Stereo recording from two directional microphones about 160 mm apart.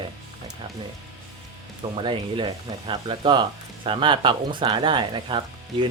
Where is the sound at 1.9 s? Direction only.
30° right (ahead or behind).